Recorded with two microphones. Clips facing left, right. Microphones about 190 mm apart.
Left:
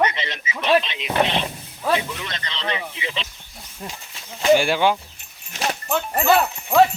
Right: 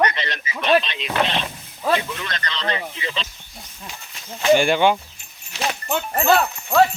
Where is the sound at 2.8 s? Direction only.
10° left (ahead or behind).